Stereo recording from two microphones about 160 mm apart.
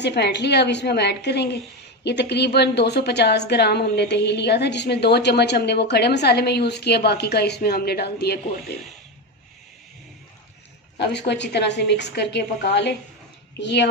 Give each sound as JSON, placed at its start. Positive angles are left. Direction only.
{"t": 0.0, "sound": "a woman's voice", "side_deg": 90}
{"t": 11.0, "sound": "a woman's voice", "side_deg": 90}